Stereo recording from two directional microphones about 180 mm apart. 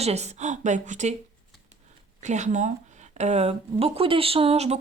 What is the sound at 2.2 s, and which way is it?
Speech, 40° right (ahead or behind).